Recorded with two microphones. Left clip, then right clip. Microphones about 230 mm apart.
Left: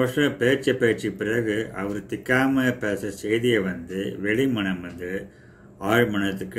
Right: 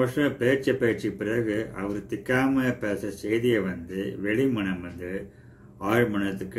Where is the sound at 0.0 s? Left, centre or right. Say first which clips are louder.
Left 3 dB; centre.